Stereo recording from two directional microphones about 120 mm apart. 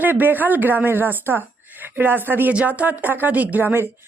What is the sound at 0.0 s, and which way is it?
A woman's voice, 15° right (ahead or behind).